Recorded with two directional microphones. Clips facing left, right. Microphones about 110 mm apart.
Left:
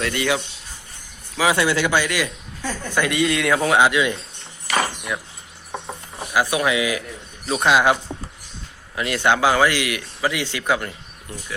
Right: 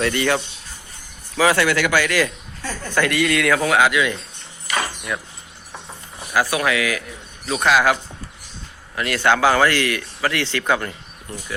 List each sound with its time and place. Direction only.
0.0 s speech: 5° left (ahead or behind)
1.6 s a man's voice: 25° left (ahead or behind)
5.1 s speech: 15° left (ahead or behind)
6.3 s a man's voice: 15° left (ahead or behind)
9.0 s speech: 20° left (ahead or behind)